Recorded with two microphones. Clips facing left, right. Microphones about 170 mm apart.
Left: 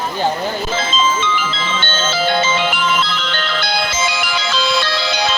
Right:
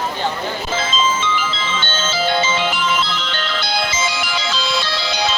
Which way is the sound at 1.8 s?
60° left (ahead or behind).